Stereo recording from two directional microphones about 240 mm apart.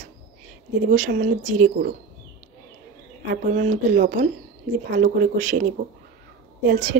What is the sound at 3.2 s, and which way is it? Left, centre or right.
Speech, right.